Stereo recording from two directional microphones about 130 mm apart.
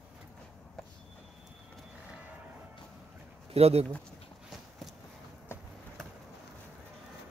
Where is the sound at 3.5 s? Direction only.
50° right (ahead or behind).